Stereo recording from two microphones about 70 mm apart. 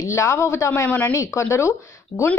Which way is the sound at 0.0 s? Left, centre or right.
Left.